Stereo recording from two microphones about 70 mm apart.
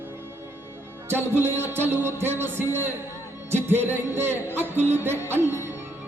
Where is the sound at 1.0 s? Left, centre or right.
Right.